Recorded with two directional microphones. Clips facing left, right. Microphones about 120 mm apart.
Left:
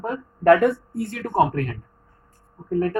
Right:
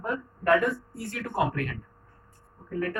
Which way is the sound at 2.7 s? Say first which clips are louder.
Left 8 dB; 35° left (ahead or behind).